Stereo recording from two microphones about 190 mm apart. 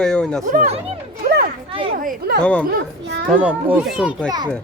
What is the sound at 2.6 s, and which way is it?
Speech, 55° right (ahead or behind).